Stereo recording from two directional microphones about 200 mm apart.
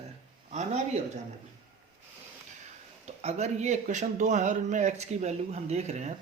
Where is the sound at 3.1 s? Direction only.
35° right (ahead or behind).